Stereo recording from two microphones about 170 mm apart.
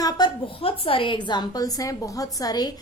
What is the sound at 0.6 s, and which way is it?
A woman's voice, 30° left (ahead or behind).